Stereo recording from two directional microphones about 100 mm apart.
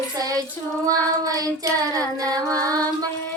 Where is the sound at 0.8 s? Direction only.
35° right (ahead or behind).